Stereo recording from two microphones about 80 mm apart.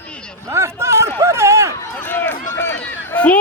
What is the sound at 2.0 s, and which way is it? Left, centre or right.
Run, left.